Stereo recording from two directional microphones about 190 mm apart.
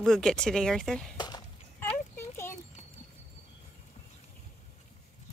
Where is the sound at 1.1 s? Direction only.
25° left (ahead or behind).